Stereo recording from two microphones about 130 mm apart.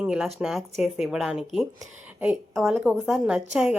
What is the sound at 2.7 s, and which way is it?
Speech, 15° right (ahead or behind).